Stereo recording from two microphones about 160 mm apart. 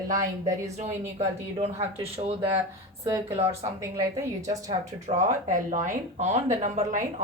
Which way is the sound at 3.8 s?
20° right (ahead or behind).